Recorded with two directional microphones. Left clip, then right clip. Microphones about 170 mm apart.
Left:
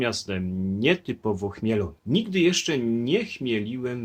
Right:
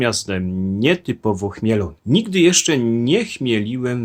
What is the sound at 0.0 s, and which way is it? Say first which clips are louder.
Speech: right 7 dB; 25° right (ahead or behind).